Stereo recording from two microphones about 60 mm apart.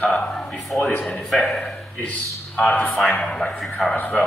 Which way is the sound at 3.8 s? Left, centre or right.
Centre.